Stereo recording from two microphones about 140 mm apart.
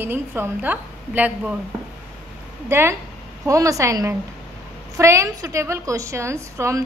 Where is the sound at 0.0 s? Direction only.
15° right (ahead or behind).